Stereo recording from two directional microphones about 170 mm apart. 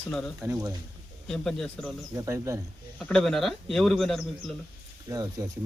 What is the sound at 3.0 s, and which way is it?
A man's voice, 5° left (ahead or behind).